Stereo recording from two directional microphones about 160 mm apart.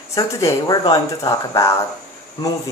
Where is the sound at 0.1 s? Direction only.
20° left (ahead or behind).